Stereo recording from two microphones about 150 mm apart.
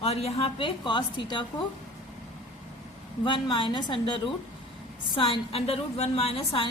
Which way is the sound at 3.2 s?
30° left (ahead or behind).